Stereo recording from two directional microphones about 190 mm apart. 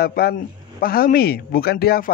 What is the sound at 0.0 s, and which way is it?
A man's voice, 55° left (ahead or behind).